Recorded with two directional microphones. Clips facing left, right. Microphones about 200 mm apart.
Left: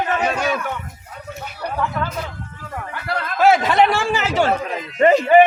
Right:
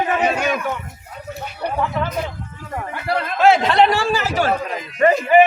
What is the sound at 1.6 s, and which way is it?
Speech, 20° right (ahead or behind).